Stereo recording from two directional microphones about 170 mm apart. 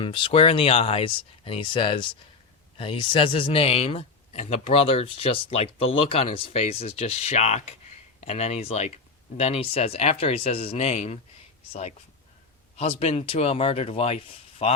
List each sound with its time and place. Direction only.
0.0 s speech: 30° left (ahead or behind)